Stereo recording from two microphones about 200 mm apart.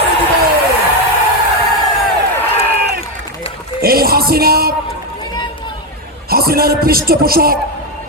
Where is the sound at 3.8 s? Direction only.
50° right (ahead or behind).